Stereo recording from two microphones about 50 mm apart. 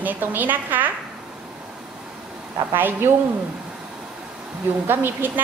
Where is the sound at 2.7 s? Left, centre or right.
Right.